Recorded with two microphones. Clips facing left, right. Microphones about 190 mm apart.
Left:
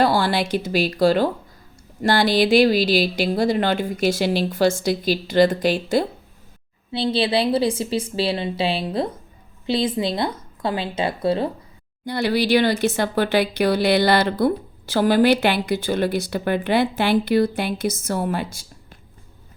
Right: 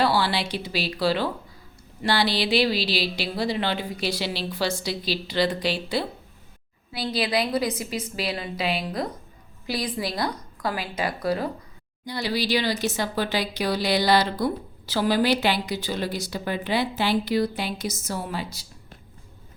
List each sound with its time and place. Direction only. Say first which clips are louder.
0.0 s speech: left 4 dB; 50° left (ahead or behind)
6.9 s a woman's voice: left 5 dB; 25° left (ahead or behind)
12.0 s speech: left 6 dB; 55° left (ahead or behind)